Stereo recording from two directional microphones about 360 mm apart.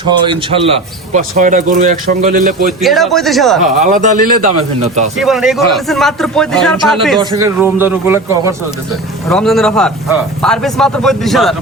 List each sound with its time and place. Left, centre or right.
0.3 s a man's voice: centre
2.6 s speech: centre
3.8 s a man's voice: right
5.1 s speech: centre
7.2 s a man's voice: centre